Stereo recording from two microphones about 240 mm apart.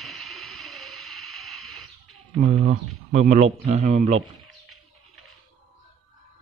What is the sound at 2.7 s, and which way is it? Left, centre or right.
Speech, right.